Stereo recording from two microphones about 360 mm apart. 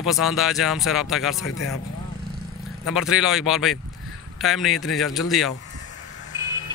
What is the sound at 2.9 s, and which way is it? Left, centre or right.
A man's voice, centre.